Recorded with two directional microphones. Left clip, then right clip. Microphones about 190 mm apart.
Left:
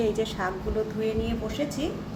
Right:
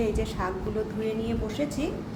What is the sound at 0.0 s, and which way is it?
A woman's voice, 5° left (ahead or behind).